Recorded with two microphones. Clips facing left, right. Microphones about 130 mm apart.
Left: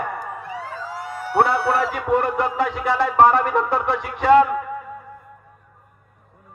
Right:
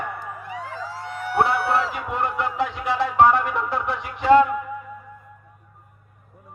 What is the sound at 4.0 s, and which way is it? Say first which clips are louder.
Speech: left 3 dB; 65° left (ahead or behind).